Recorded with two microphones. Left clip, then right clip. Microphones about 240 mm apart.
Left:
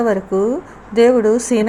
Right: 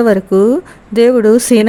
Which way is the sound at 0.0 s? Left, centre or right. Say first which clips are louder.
Right 6 dB; right.